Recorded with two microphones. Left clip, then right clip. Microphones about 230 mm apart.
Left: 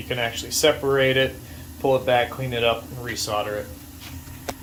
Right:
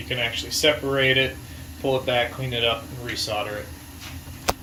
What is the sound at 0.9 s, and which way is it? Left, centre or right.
Speech, left.